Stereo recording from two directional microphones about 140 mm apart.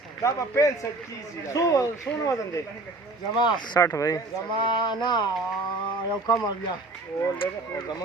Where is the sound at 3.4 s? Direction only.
30° left (ahead or behind).